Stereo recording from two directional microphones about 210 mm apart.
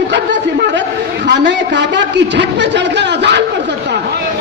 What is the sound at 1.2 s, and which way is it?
A man's voice, 55° right (ahead or behind).